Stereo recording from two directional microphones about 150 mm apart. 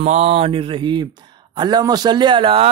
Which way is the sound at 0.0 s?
45° right (ahead or behind).